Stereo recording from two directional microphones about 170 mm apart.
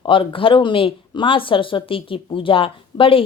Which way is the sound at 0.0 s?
30° left (ahead or behind).